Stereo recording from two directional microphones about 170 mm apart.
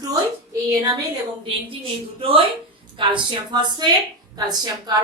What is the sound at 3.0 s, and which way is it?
A woman's voice, 30° right (ahead or behind).